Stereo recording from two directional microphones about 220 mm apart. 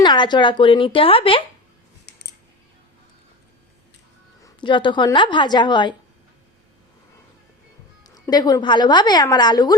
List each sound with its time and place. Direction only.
0.0 s a woman's voice: 20° left (ahead or behind)
4.4 s a woman's voice: 20° left (ahead or behind)
8.0 s a woman's voice: 15° left (ahead or behind)